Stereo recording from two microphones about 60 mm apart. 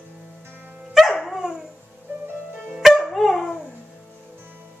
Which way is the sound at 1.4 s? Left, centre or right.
Centre.